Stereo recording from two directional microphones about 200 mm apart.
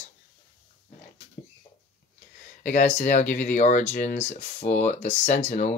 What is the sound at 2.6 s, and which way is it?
Speech, 35° left (ahead or behind).